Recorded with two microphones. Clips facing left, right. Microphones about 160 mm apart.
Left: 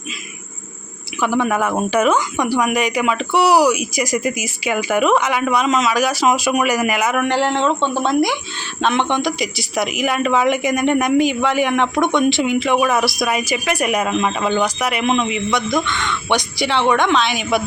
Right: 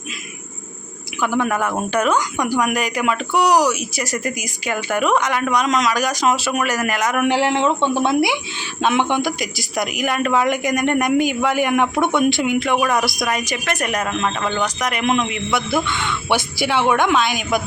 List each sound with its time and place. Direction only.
1.2 s speech: centre (ahead or behind)
7.2 s a man's voice: 10° right (ahead or behind)